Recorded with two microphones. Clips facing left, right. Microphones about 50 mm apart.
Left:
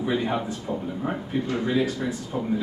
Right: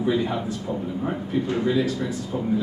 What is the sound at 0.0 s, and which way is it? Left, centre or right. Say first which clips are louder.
Speech: right 2 dB; centre.